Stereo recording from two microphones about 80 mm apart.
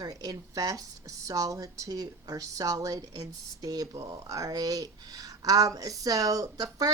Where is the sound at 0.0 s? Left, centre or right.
Right.